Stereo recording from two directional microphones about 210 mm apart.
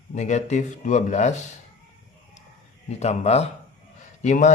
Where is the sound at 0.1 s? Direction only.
35° left (ahead or behind).